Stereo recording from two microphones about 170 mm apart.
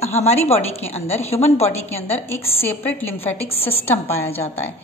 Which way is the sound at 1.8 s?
10° left (ahead or behind).